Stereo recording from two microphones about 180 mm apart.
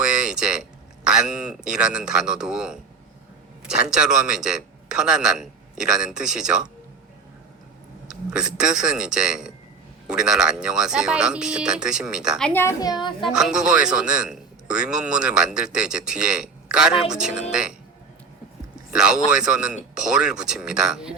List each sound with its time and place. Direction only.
0.0 s a sound: 5° right (ahead or behind)
1.0 s a man's voice: 5° right (ahead or behind)
8.1 s a man's voice: 5° right (ahead or behind)
12.5 s a woman's voice: 15° left (ahead or behind)
13.2 s a man's voice: 5° right (ahead or behind)
18.9 s a man's voice: 5° right (ahead or behind)